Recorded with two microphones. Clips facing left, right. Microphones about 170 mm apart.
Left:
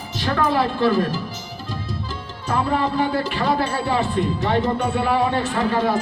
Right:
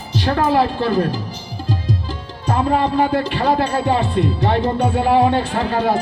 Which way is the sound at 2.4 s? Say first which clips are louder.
Right 4 dB; 40° right (ahead or behind).